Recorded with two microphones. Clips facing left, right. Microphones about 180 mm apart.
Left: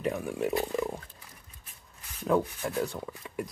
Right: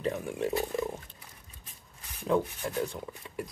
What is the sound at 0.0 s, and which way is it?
Speech, 10° left (ahead or behind).